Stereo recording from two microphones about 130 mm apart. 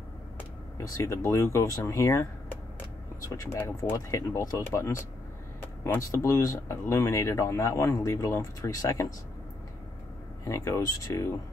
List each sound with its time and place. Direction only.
0.7 s speech: 25° left (ahead or behind)
3.3 s speech: 20° left (ahead or behind)
5.9 s speech: 20° left (ahead or behind)
10.4 s speech: 25° left (ahead or behind)